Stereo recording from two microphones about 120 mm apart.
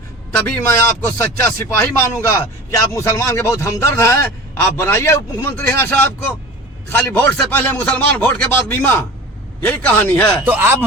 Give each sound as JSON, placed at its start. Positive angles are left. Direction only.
{"t": 0.3, "sound": "speech", "side_deg": 15}
{"t": 10.4, "sound": "speech", "side_deg": -15}